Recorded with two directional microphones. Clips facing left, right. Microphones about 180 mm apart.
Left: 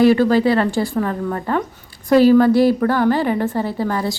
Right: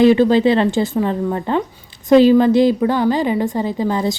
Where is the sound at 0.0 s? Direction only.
20° right (ahead or behind).